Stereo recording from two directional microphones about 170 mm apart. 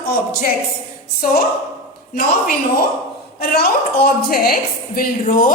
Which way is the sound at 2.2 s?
55° left (ahead or behind).